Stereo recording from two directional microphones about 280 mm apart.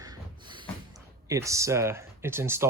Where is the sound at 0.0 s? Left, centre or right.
Centre.